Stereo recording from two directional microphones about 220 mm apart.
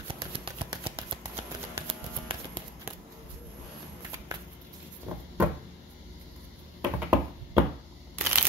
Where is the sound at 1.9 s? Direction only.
25° right (ahead or behind).